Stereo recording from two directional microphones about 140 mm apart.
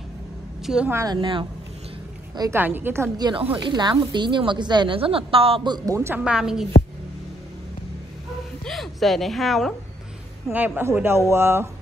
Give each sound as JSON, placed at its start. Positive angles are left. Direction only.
{"t": 0.8, "sound": "a woman's voice", "side_deg": -25}
{"t": 2.5, "sound": "speech", "side_deg": -15}
{"t": 3.2, "sound": "a woman's voice", "side_deg": -30}
{"t": 5.7, "sound": "a woman's voice", "side_deg": -25}
{"t": 6.1, "sound": "a woman's voice", "side_deg": -5}
{"t": 8.6, "sound": "a woman's voice", "side_deg": 0}
{"t": 10.5, "sound": "speech", "side_deg": -10}